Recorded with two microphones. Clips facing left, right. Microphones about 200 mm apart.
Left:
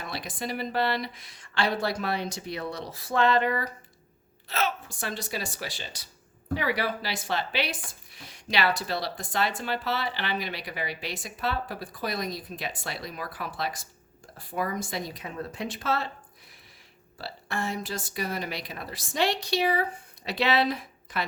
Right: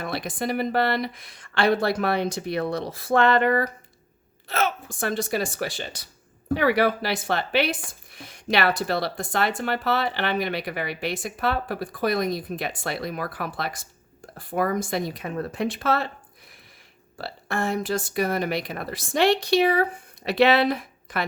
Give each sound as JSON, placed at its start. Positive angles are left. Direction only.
{"t": 0.0, "sound": "speech", "side_deg": -55}
{"t": 17.2, "sound": "speech", "side_deg": -55}